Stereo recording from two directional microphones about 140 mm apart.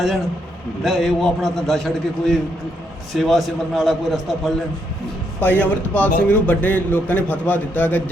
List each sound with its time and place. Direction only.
0.9 s a man's voice: centre (ahead or behind)
5.4 s speech: 10° left (ahead or behind)